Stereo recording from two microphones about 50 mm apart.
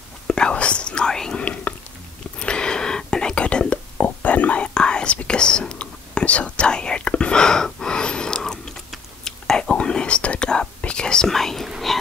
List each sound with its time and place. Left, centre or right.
0.3 s whispering: centre
1.4 s whispering: left
4.7 s whispering: centre
11.2 s whispering: centre